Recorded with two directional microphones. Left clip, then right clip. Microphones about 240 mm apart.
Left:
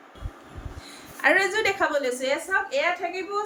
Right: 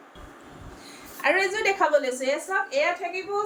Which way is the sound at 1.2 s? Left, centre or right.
Centre.